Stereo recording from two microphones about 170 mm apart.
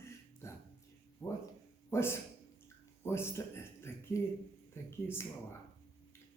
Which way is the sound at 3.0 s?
15° left (ahead or behind).